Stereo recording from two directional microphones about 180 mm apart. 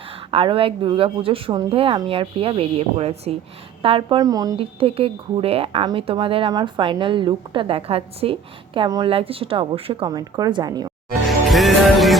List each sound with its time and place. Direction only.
0.3 s a woman's voice: 30° right (ahead or behind)
11.3 s music: centre (ahead or behind)